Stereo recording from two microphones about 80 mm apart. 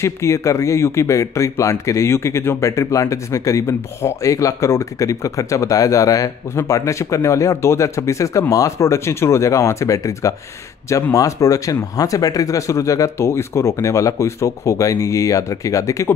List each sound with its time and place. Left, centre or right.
0.0 s speech: left